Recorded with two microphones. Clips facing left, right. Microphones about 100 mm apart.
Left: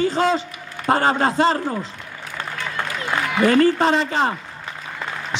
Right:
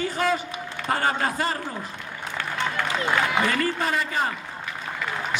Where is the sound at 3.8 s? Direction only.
25° left (ahead or behind).